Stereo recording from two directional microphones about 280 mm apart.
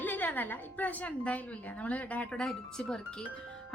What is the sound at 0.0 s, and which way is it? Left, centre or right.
A woman's voice, centre.